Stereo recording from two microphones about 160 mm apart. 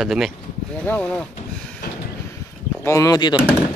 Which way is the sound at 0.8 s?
10° left (ahead or behind).